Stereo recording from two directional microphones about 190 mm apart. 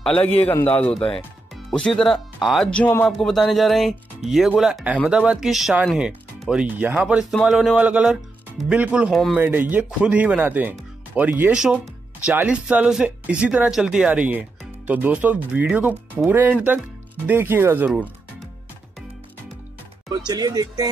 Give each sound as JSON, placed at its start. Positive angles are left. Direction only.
{"t": 0.0, "sound": "a man's voice", "side_deg": 5}
{"t": 20.1, "sound": "speech", "side_deg": -20}